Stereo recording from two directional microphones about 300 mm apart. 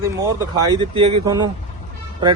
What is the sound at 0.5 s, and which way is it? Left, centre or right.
Speech, centre.